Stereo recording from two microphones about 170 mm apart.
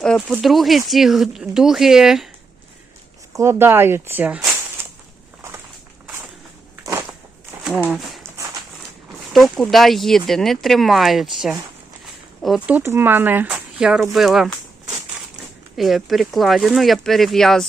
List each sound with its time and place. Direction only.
0.0 s speech: centre (ahead or behind)
3.3 s speech: 15° right (ahead or behind)
6.8 s walk: 20° right (ahead or behind)
9.3 s speech: centre (ahead or behind)
15.7 s speech: centre (ahead or behind)